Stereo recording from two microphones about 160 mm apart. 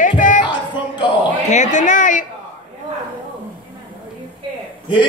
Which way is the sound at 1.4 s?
50° left (ahead or behind).